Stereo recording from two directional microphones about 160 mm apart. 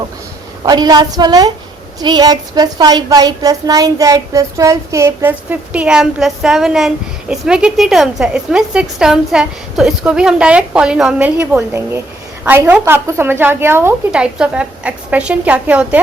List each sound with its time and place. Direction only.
0.6 s a woman's voice: 25° right (ahead or behind); by 16.0 s 10° right (ahead or behind)